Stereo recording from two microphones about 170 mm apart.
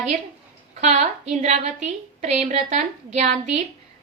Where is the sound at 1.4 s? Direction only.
40° right (ahead or behind).